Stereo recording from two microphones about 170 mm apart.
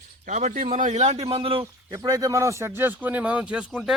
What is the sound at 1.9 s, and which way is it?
A man's voice, 20° right (ahead or behind).